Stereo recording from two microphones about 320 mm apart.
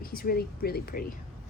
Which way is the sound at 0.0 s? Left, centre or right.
Left.